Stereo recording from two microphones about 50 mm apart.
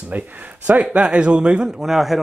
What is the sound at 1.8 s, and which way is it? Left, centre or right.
Speech, centre.